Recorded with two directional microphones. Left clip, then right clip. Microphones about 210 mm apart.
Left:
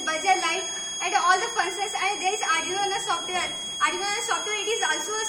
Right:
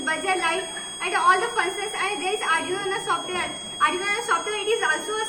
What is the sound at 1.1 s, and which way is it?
A woman's voice, 20° left (ahead or behind).